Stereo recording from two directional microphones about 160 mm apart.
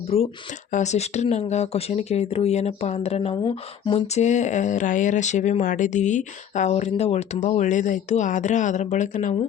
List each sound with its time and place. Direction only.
0.1 s speech: 40° left (ahead or behind)